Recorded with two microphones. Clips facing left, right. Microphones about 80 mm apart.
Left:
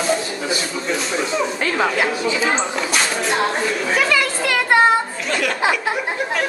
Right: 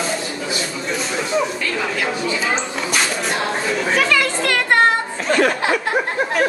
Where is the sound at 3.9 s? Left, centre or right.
Centre.